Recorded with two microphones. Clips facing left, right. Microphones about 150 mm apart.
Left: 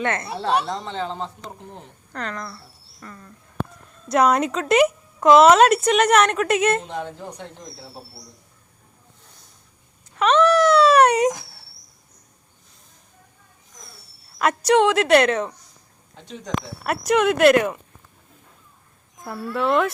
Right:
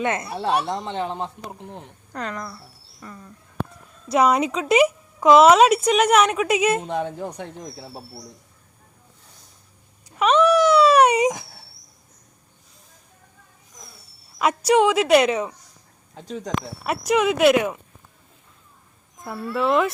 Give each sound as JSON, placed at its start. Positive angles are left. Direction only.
{"t": 0.0, "sound": "a man's voice", "side_deg": -15}
{"t": 6.8, "sound": "a woman's voice", "side_deg": -55}
{"t": 10.2, "sound": "a sound", "side_deg": -5}
{"t": 14.3, "sound": "speech", "side_deg": -5}
{"t": 16.1, "sound": "speech", "side_deg": -40}
{"t": 16.8, "sound": "speech", "side_deg": 0}
{"t": 19.2, "sound": "speech", "side_deg": 0}